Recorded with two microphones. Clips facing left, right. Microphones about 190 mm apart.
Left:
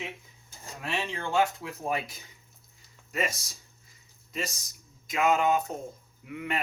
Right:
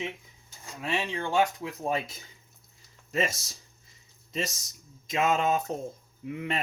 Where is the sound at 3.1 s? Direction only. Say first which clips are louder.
Right 2 dB; 25° right (ahead or behind).